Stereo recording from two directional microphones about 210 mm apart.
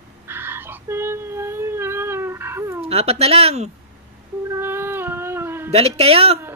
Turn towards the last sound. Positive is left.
turn(degrees=-30)  # may be behind; listen again after turning